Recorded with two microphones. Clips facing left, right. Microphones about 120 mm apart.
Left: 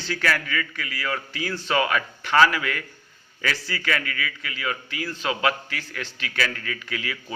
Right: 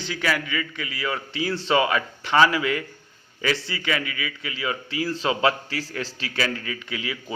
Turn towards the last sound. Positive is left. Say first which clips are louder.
# right 1 dB
turn(degrees=-20)  # may be behind; listen again after turning